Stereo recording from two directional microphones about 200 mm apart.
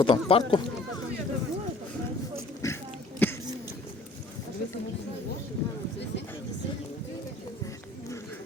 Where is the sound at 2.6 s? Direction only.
15° left (ahead or behind).